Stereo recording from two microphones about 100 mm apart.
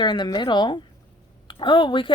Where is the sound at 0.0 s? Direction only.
50° left (ahead or behind).